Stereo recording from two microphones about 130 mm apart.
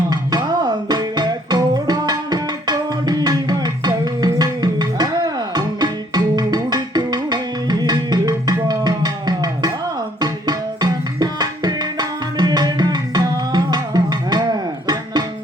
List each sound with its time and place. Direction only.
0.1 s music: 30° right (ahead or behind)
10.2 s tabla: 30° right (ahead or behind)